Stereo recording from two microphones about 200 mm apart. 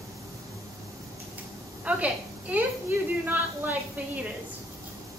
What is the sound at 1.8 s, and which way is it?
A woman's voice, 5° right (ahead or behind).